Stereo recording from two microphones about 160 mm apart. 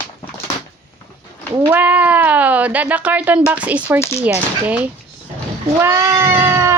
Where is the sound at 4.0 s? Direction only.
15° left (ahead or behind).